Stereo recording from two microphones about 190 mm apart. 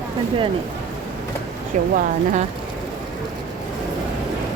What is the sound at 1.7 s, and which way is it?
Speech, 40° right (ahead or behind).